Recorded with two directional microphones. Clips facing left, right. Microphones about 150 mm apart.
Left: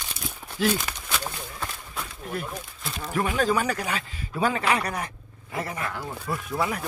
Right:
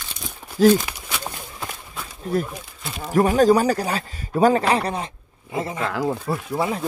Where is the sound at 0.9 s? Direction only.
10° right (ahead or behind).